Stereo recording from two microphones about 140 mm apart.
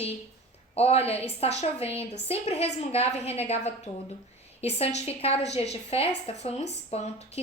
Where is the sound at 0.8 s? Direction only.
45° left (ahead or behind).